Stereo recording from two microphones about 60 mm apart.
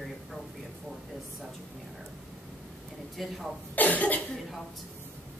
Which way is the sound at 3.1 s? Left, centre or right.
Centre.